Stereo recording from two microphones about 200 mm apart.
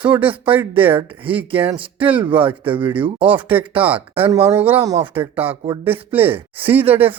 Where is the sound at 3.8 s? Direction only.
10° right (ahead or behind).